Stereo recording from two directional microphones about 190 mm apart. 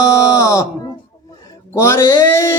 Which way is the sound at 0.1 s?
15° left (ahead or behind).